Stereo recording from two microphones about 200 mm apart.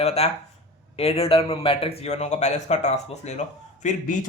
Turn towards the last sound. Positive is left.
turn(degrees=35)  # may be behind; listen again after turning